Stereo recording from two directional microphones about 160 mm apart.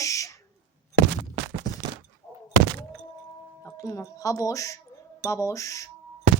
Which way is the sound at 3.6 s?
20° left (ahead or behind).